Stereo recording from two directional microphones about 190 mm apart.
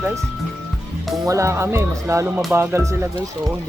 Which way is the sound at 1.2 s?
15° right (ahead or behind).